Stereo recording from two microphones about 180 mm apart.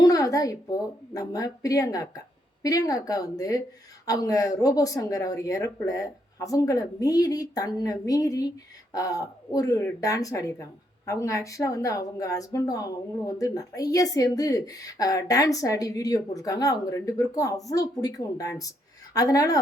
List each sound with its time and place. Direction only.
0.0 s a woman's voice: 20° left (ahead or behind)